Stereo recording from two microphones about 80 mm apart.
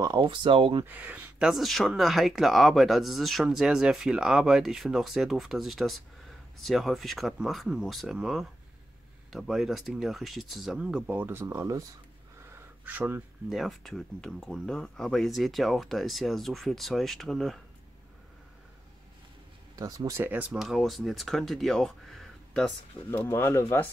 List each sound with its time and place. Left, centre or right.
0.2 s speech: right
0.8 s speech: right
1.4 s speech: centre
11.1 s speech: right
12.5 s a sound: right
13.5 s speech: centre
19.7 s speech: right
20.2 s speech: centre
20.5 s speech: centre
23.0 s speech: left